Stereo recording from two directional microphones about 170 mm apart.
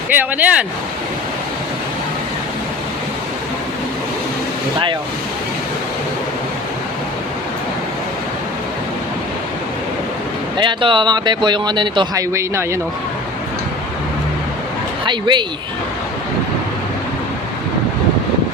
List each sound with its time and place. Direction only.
0.1 s speech: 10° right (ahead or behind)
10.6 s speech: 30° right (ahead or behind)
12.3 s speech: 15° right (ahead or behind)
15.0 s speech: 25° right (ahead or behind)